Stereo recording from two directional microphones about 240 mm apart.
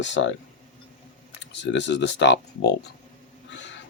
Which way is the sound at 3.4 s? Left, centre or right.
Left.